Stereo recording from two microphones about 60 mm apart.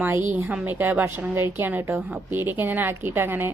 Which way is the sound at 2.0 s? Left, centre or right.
Right.